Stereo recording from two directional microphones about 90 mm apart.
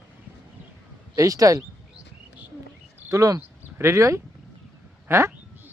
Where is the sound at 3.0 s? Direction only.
35° right (ahead or behind).